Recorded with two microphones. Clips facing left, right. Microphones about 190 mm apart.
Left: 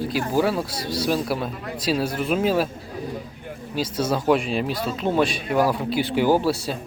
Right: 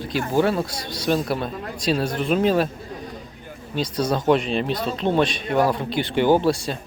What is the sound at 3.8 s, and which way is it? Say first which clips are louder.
Speech: right 1 dB; 5° left (ahead or behind).